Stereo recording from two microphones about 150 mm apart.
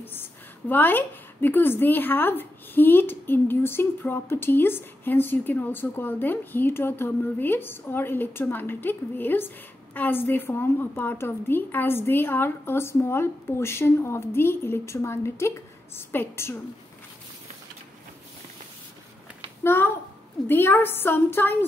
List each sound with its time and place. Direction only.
0.0 s a woman's voice: 15° left (ahead or behind)
19.6 s a woman's voice: 15° left (ahead or behind)